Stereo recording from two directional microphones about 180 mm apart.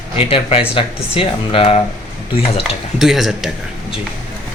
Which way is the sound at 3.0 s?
Centre (ahead or behind).